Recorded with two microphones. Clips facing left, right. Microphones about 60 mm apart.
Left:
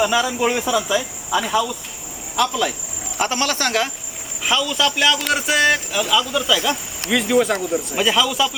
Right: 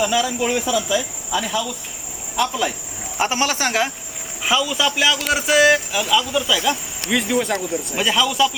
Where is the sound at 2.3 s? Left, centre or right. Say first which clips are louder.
Left 1 dB; centre.